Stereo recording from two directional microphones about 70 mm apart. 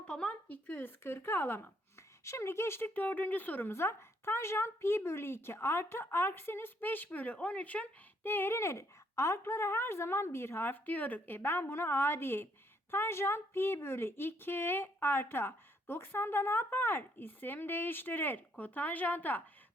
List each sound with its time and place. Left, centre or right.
0.1 s speech: centre
2.2 s a woman's voice: left
8.3 s a woman's voice: left